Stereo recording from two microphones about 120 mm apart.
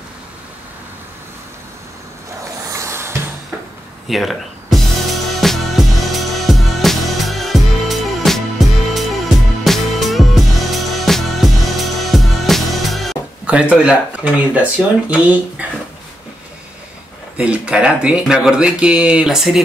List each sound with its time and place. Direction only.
2.7 s music: 25° right (ahead or behind)
4.1 s a sound: centre (ahead or behind)
5.4 s music: centre (ahead or behind)
17.4 s speech: 10° right (ahead or behind)